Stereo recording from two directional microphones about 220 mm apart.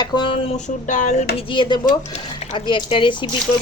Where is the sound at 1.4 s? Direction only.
20° left (ahead or behind).